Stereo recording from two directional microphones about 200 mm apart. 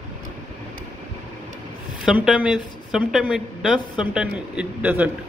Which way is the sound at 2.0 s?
5° right (ahead or behind).